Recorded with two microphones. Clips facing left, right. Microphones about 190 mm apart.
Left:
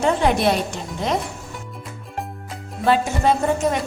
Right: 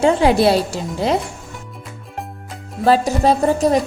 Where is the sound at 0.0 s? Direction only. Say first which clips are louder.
Right 5 dB; 30° right (ahead or behind).